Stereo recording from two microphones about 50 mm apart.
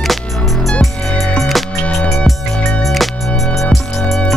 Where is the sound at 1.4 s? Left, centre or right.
Centre.